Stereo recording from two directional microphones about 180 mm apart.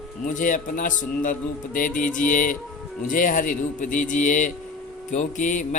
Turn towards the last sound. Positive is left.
turn(degrees=45)  # may be behind; listen again after turning